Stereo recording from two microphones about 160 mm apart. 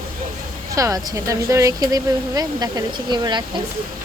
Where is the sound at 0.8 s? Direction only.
20° right (ahead or behind).